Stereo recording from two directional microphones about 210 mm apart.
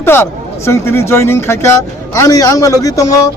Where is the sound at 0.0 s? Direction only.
10° left (ahead or behind).